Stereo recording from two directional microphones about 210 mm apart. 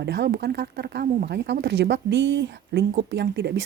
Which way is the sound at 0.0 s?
55° right (ahead or behind).